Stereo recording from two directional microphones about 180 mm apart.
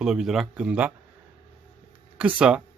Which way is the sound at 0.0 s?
5° right (ahead or behind).